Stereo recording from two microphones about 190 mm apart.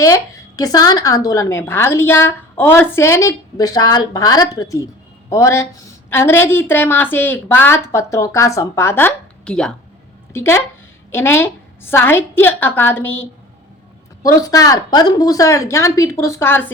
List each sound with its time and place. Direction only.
0.0 s a woman's voice: 15° left (ahead or behind)